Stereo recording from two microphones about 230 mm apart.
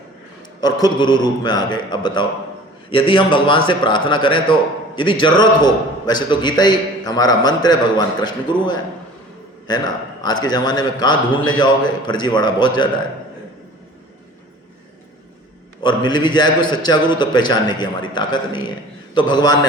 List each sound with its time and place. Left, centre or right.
0.6 s a man's voice: centre
9.6 s a man's voice: centre
15.8 s a man's voice: centre